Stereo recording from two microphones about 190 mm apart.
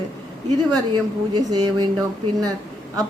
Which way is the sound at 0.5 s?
25° right (ahead or behind).